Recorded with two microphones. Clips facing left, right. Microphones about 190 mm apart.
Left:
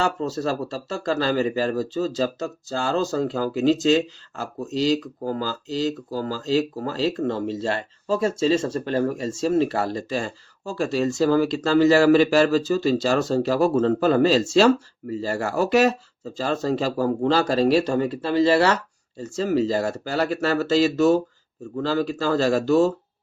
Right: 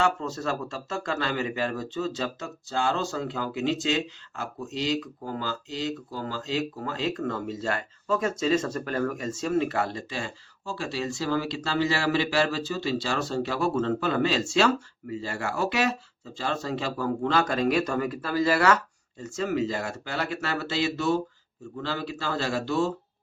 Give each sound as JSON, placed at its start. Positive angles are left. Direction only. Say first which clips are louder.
{"t": 0.0, "sound": "speech", "louder": "left 3 dB", "side_deg": 35}